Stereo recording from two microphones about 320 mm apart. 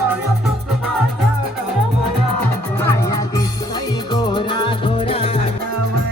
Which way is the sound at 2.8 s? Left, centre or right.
Centre.